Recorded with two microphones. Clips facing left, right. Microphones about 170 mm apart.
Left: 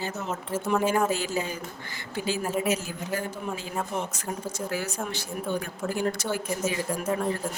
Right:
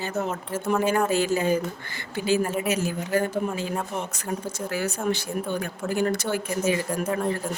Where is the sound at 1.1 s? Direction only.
55° right (ahead or behind).